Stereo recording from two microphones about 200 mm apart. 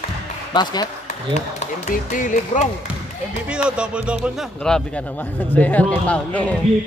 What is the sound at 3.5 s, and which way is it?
Speech, 5° right (ahead or behind).